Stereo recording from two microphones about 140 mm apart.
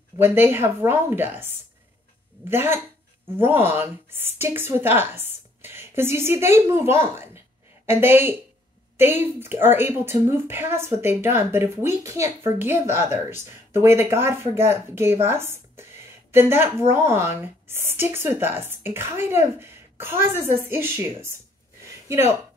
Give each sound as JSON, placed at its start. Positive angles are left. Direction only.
{"t": 0.2, "sound": "a woman's voice", "side_deg": -15}